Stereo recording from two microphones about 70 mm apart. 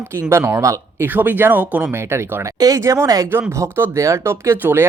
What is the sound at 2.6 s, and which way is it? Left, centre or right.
Speech, right.